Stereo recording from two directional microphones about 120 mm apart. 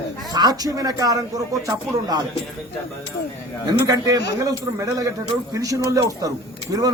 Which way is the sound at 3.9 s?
30° right (ahead or behind).